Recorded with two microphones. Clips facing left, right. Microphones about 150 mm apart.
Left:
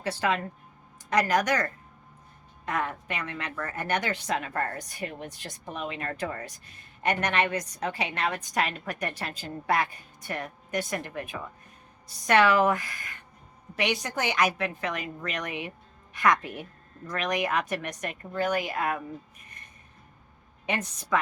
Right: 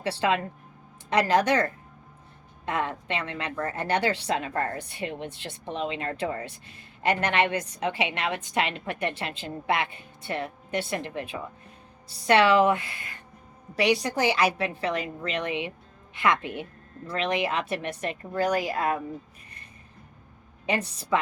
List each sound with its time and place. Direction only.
0.0 s speech: 30° right (ahead or behind)
2.6 s a woman's voice: 25° right (ahead or behind)
20.7 s a woman's voice: 30° right (ahead or behind)